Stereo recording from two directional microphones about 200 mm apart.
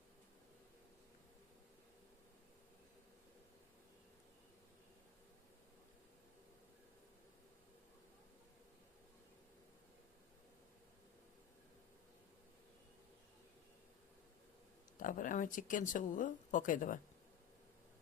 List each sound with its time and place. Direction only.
14.9 s speech: 40° left (ahead or behind)